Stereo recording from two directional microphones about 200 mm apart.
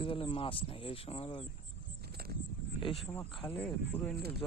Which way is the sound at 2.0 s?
50° right (ahead or behind).